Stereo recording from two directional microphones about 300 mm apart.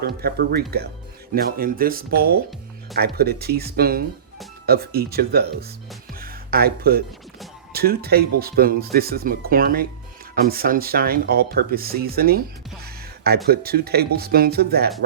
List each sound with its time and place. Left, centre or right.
0.2 s speech: right
6.1 s music: right
7.7 s speech: right